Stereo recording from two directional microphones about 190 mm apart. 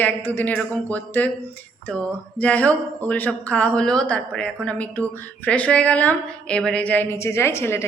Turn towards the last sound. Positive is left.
turn(degrees=15)  # may be behind; listen again after turning